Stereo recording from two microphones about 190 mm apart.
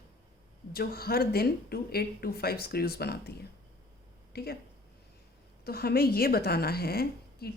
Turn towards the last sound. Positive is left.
turn(degrees=55)  # may be behind; listen again after turning